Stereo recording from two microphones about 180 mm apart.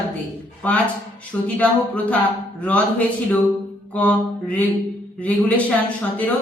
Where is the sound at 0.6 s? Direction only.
10° left (ahead or behind).